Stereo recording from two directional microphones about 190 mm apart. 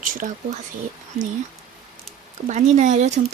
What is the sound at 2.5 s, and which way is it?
Speech, 40° right (ahead or behind).